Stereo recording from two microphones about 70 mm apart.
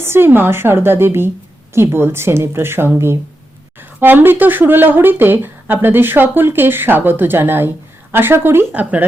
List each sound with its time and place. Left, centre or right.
0.0 s speech: right
8.7 s speech: right